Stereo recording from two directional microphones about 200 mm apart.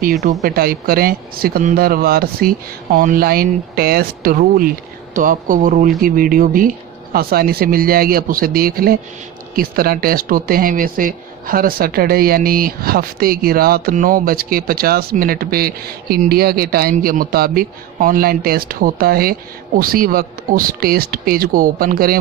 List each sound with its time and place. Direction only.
0.0 s speech: 50° right (ahead or behind)